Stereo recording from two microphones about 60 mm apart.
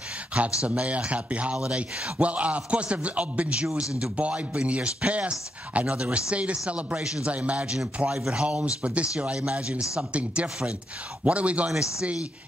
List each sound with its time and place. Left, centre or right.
0.3 s a man's voice: centre
11.7 s speech: centre